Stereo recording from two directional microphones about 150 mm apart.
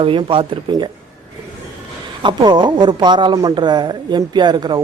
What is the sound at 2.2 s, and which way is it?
A man's voice, 30° right (ahead or behind).